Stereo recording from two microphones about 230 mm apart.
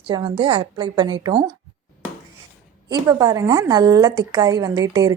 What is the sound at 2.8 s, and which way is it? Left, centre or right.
A woman's voice, centre.